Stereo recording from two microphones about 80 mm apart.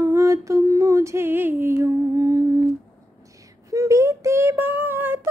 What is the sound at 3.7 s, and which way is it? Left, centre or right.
Child singing, right.